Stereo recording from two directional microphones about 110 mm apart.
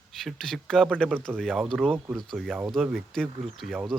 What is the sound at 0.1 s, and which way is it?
Speech, centre (ahead or behind).